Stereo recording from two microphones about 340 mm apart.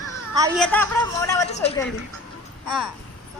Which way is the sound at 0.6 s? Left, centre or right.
Centre.